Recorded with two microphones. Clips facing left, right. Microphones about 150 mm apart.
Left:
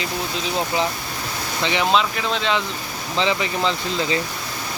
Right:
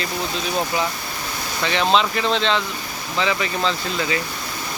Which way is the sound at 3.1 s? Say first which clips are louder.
Left 1 dB; 25° left (ahead or behind).